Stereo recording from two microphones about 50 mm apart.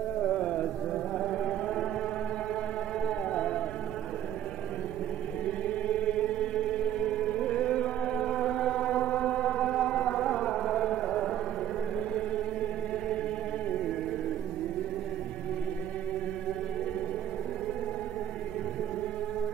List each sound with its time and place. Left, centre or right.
0.2 s carnatic music: centre
1.1 s music: centre
3.1 s music: centre
5.9 s chant: left
8.2 s music: centre
9.9 s carnatic music: centre